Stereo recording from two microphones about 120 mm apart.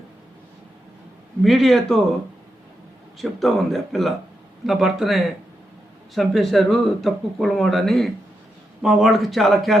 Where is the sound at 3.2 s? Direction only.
Centre (ahead or behind).